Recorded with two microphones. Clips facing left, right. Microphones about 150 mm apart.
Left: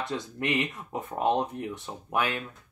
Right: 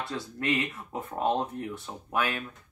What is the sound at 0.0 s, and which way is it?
Speech, 20° left (ahead or behind).